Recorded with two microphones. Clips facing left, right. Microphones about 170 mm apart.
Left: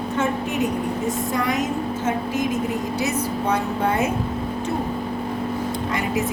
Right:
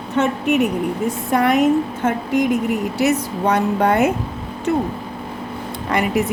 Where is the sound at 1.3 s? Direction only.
60° right (ahead or behind).